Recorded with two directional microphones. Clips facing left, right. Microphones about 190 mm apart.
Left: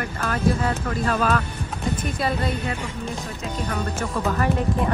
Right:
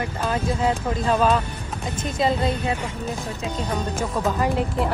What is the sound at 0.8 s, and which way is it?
Speech, 30° right (ahead or behind).